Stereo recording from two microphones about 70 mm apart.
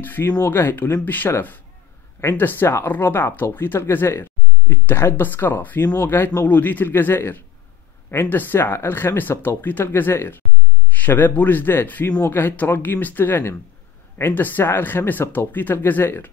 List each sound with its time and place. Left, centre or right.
0.0 s speech: left